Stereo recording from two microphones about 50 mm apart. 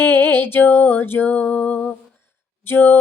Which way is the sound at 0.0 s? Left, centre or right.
Left.